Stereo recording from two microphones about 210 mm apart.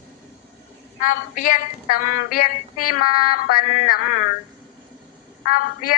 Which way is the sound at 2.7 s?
90° left.